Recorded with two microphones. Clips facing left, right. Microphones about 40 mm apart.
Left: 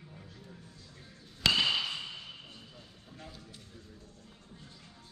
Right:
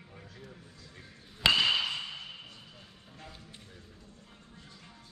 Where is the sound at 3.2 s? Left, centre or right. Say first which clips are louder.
Even; right.